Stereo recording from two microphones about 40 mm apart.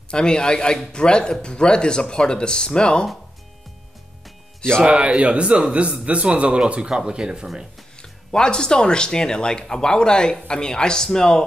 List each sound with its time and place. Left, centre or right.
0.1 s speech: left
4.8 s a man's voice: right
6.9 s speech: centre
8.0 s speech: centre